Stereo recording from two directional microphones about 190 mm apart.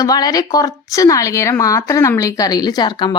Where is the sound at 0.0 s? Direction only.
20° left (ahead or behind).